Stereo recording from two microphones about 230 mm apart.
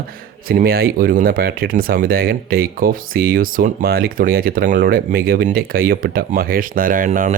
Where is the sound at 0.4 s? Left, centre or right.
Right.